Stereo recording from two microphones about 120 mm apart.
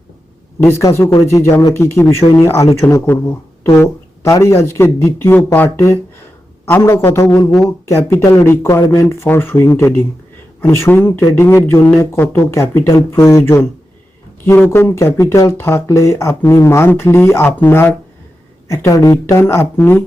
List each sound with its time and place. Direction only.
0.6 s speech: 25° left (ahead or behind)